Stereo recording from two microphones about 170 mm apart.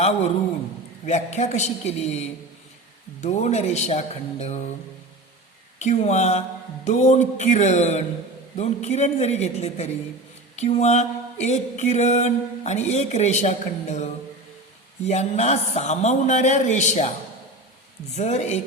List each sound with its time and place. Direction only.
1.0 s speech: 45° left (ahead or behind)
5.8 s speech: 40° left (ahead or behind)
6.8 s a sound: 45° left (ahead or behind)
8.5 s speech: 40° left (ahead or behind)
10.5 s a sound: 40° left (ahead or behind)
18.1 s speech: 40° left (ahead or behind)